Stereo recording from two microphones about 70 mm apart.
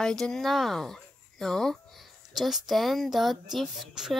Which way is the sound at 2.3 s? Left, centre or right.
Centre.